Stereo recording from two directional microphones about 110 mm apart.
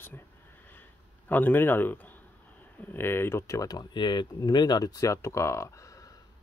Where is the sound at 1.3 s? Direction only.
15° left (ahead or behind).